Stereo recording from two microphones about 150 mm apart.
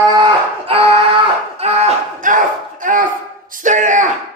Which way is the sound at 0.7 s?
40° right (ahead or behind).